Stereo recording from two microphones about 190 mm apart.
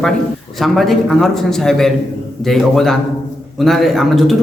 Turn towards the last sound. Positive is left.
turn(degrees=0)  # may be behind; listen again after turning